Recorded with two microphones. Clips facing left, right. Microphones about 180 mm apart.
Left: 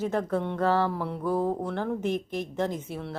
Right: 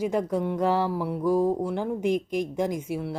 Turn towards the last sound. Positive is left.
turn(degrees=-10)  # may be behind; listen again after turning